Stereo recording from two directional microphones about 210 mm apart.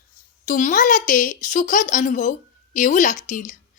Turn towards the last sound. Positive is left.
turn(degrees=35)  # may be behind; listen again after turning